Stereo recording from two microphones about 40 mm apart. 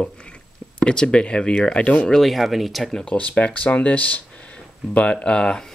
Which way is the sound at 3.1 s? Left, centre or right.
Left.